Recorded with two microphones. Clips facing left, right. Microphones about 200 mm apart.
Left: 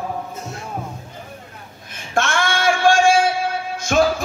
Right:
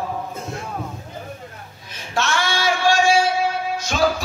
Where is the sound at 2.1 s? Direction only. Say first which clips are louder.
Left 2 dB; 50° left (ahead or behind).